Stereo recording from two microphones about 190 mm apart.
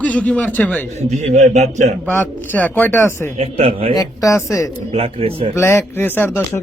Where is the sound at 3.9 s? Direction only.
20° left (ahead or behind).